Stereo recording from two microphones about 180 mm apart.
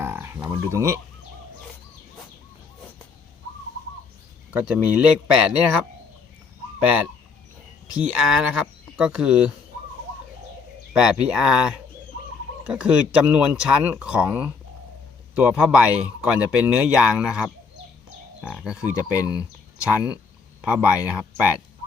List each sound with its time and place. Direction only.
0.0 s livestock: 15° right (ahead or behind)
0.4 s speech: 15° right (ahead or behind)
4.5 s speech: 5° right (ahead or behind)
7.9 s speech: 5° right (ahead or behind)
10.9 s speech: 5° right (ahead or behind)